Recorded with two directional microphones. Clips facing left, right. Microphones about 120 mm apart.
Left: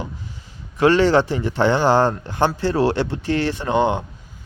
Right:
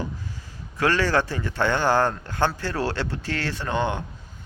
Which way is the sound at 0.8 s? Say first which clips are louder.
Left 7 dB; 20° left (ahead or behind).